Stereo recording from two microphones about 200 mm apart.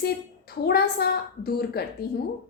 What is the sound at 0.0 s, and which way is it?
A woman's voice, 50° left (ahead or behind).